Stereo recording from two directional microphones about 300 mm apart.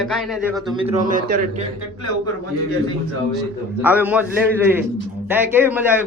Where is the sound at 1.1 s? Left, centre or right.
Right.